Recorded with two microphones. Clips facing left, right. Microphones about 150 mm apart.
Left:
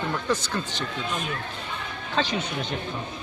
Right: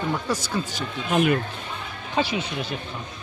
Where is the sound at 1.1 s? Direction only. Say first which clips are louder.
Right 16 dB; 70° right (ahead or behind).